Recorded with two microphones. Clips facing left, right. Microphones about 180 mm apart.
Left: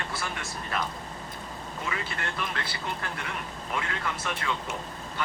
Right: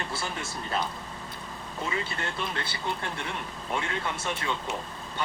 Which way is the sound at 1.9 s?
25° right (ahead or behind).